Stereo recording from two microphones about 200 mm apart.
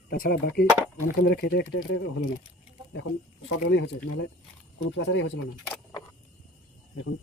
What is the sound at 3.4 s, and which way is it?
Speech, 65° left (ahead or behind).